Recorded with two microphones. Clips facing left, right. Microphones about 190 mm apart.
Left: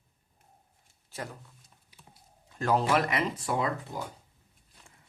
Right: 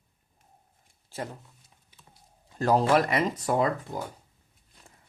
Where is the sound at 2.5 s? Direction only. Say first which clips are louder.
Right 4 dB; 35° right (ahead or behind).